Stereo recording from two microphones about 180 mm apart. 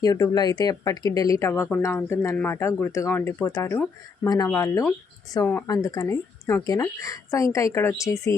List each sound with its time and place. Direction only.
0.0 s speech: 20° left (ahead or behind)